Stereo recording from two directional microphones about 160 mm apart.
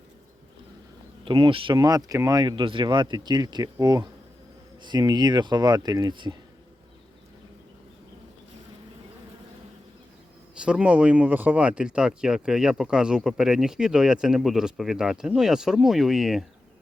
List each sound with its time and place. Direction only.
1.2 s speech: 30° right (ahead or behind)
10.6 s speech: 5° right (ahead or behind)